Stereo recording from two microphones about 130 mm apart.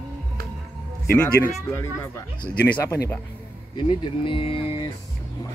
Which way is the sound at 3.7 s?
40° left (ahead or behind).